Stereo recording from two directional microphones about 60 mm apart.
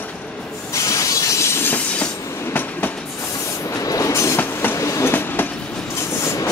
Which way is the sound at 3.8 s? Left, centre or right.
Left.